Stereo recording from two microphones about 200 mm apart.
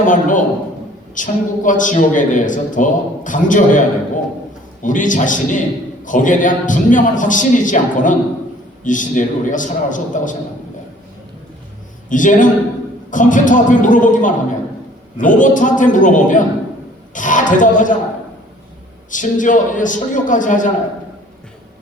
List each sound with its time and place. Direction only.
0.0 s a man's voice: 40° left (ahead or behind)
12.0 s a man's voice: 40° left (ahead or behind)
19.1 s a man's voice: 40° left (ahead or behind)